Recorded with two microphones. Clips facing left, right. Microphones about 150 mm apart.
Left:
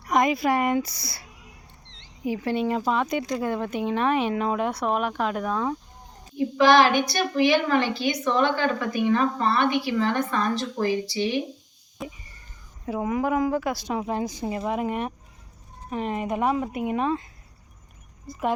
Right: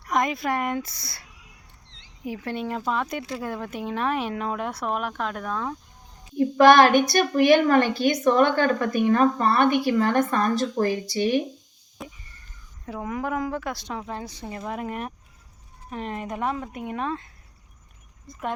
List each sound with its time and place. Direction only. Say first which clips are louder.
0.0 s speech: left 3 dB; centre (ahead or behind)
2.2 s speech: left 5 dB; centre (ahead or behind)
6.6 s speech: right 3 dB; 50° right (ahead or behind)
12.0 s speech: left 4 dB; centre (ahead or behind)
12.8 s a woman's voice: left 4 dB; 10° left (ahead or behind)